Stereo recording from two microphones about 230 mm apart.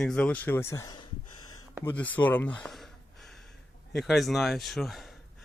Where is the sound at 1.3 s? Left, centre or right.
Left.